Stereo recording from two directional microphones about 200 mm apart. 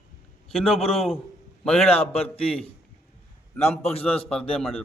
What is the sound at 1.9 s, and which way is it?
Speech, 30° left (ahead or behind).